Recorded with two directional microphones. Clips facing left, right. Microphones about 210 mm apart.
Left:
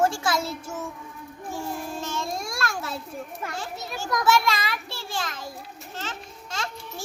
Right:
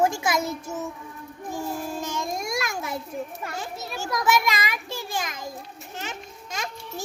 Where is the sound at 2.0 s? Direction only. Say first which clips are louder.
Right 1 dB; 15° right (ahead or behind).